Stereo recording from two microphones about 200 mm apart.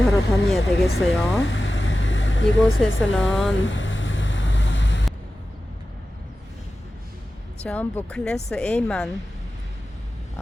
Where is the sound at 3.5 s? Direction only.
70° left (ahead or behind).